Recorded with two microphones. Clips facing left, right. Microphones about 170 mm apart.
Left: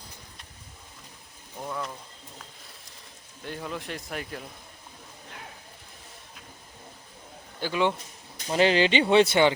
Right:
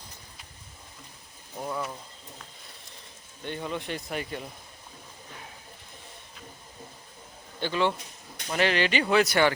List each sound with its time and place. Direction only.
1.5 s speech: 5° right (ahead or behind)
3.4 s speech: centre (ahead or behind)
7.6 s a man's voice: 15° left (ahead or behind)
8.4 s speech: 30° left (ahead or behind)